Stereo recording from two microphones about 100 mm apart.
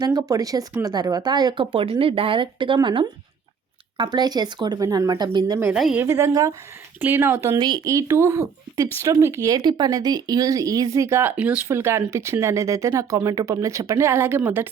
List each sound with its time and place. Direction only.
0.0 s speech: 40° right (ahead or behind)
1.7 s speech: 60° right (ahead or behind); by 5.5 s 45° right (ahead or behind)
5.7 s speech: 5° right (ahead or behind)
6.0 s speech: 25° right (ahead or behind)
7.0 s speech: 20° right (ahead or behind)
9.6 s speech: 45° right (ahead or behind); by 11.6 s 15° right (ahead or behind)
11.7 s speech: 25° right (ahead or behind)